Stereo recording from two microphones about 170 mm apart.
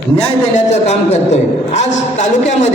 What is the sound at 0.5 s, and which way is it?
A man's voice, 40° left (ahead or behind).